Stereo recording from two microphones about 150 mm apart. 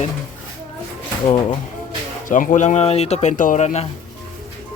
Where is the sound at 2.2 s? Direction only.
60° left (ahead or behind).